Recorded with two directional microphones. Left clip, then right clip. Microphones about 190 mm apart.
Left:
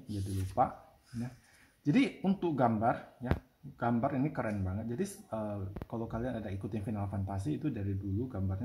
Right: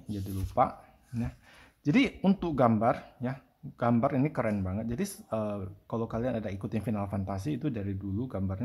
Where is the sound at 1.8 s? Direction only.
25° right (ahead or behind).